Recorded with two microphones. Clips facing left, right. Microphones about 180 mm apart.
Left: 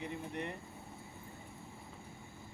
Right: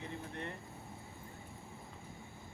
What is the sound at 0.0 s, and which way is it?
Air conditioning, 15° left (ahead or behind).